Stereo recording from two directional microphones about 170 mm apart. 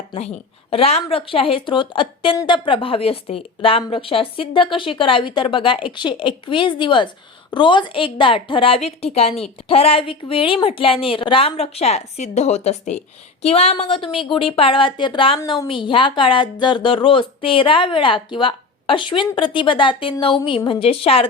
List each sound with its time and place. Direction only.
0.1 s a woman's voice: 35° left (ahead or behind)